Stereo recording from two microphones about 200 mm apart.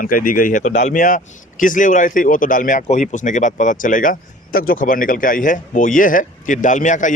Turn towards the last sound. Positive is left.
turn(degrees=40)  # may be behind; listen again after turning